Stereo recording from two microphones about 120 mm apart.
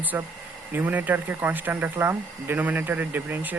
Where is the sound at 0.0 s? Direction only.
15° right (ahead or behind).